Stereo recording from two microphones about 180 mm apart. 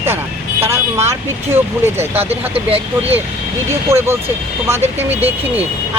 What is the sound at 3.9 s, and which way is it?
Speech, 15° right (ahead or behind).